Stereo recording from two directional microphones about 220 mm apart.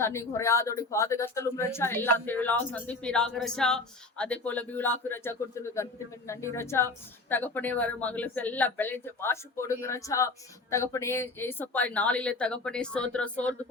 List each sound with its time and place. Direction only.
0.0 s a woman's voice: 10° left (ahead or behind)